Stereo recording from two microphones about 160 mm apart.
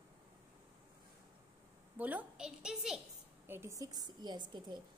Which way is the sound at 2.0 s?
10° right (ahead or behind).